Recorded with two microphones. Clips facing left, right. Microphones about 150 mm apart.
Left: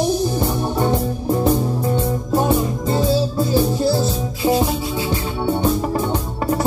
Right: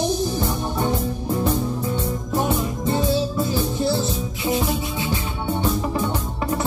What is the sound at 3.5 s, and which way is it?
Music, 35° left (ahead or behind).